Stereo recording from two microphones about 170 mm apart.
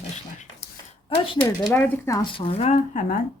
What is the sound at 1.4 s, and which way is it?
Speech, 20° left (ahead or behind).